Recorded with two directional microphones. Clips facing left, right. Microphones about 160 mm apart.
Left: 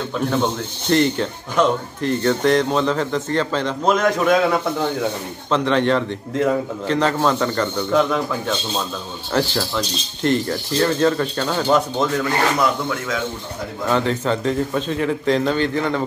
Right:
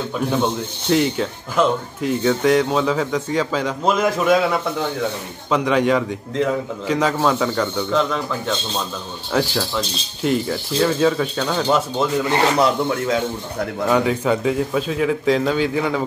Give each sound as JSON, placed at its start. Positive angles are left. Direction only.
{"t": 0.1, "sound": "speech", "side_deg": -5}
{"t": 12.2, "sound": "speech", "side_deg": -25}
{"t": 13.8, "sound": "speech", "side_deg": -10}